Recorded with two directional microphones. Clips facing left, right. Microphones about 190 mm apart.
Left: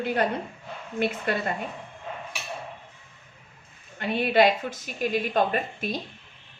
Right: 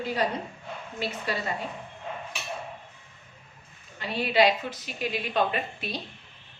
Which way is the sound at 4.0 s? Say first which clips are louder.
Left 2 dB; 50° left (ahead or behind).